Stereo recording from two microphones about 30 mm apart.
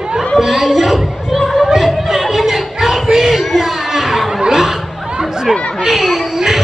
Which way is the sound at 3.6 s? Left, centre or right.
Centre.